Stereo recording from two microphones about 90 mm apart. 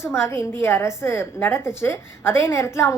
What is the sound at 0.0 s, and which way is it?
A woman's voice, 30° left (ahead or behind).